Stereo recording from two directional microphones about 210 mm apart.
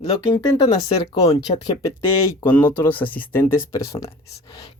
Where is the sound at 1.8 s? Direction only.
15° left (ahead or behind).